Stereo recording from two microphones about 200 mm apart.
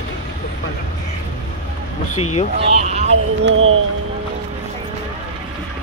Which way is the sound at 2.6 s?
30° right (ahead or behind).